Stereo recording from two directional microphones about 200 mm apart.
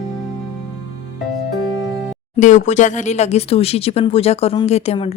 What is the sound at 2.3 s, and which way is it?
Speech, 35° left (ahead or behind).